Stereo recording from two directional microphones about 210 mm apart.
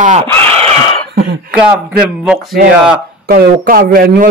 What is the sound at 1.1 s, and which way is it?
Cough, 50° right (ahead or behind).